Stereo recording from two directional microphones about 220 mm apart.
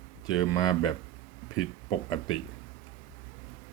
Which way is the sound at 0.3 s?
15° left (ahead or behind).